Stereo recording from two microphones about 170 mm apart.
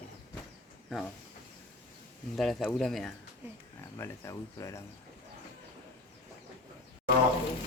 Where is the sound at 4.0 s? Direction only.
15° left (ahead or behind).